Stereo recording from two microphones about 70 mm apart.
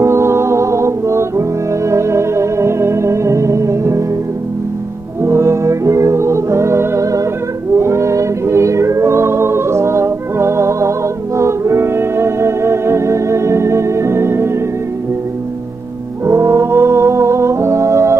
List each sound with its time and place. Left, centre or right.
0.0 s music: right
5.2 s music: right
7.0 s music: right
7.7 s music: right
16.3 s music: right